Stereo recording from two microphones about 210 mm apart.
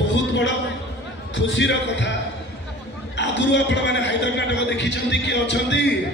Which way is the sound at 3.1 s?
60° left (ahead or behind).